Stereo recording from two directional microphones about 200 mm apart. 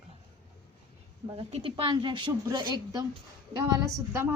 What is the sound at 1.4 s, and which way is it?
A woman's voice, 25° right (ahead or behind).